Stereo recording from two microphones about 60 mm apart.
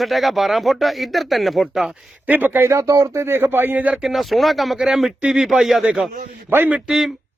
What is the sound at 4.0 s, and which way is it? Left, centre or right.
Speech, centre.